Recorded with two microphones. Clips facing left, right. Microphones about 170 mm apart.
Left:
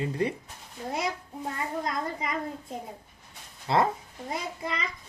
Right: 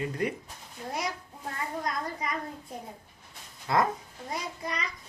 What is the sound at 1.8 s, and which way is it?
A child's voice, 25° left (ahead or behind).